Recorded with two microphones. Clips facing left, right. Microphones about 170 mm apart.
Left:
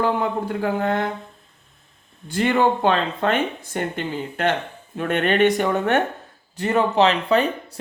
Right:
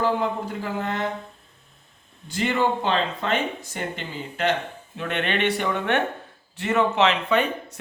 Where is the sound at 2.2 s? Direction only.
50° left (ahead or behind).